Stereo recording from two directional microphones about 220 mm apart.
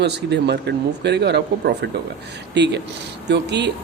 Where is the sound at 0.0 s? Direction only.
50° right (ahead or behind).